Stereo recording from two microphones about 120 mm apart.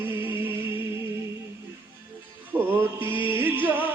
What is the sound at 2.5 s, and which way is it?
Music, 15° right (ahead or behind).